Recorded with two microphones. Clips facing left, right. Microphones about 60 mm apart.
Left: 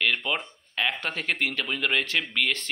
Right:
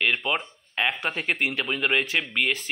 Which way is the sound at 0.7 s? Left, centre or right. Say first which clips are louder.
Right 2 dB; centre.